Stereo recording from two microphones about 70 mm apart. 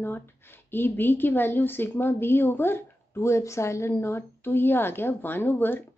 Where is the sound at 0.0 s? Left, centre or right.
Left.